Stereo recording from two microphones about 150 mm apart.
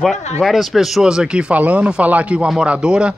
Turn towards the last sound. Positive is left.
turn(degrees=-5)  # may be behind; listen again after turning